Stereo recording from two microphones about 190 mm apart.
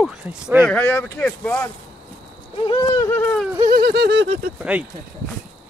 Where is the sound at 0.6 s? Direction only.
10° left (ahead or behind).